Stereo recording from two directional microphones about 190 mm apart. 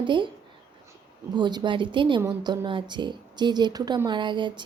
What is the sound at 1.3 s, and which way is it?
A woman's voice, 25° right (ahead or behind).